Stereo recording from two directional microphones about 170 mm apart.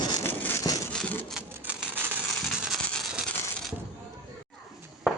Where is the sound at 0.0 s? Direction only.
25° left (ahead or behind).